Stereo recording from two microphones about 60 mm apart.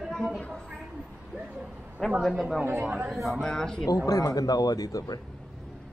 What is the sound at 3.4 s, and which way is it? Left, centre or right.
Speech, centre.